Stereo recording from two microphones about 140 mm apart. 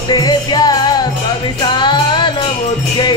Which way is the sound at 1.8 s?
35° left (ahead or behind).